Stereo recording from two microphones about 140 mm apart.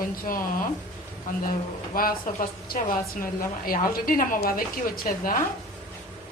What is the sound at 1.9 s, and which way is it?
Speech, 90° left.